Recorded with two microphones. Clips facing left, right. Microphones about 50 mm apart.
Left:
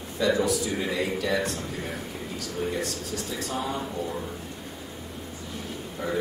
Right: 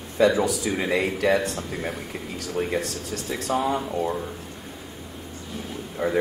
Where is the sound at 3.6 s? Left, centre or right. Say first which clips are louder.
Right 6 dB; right.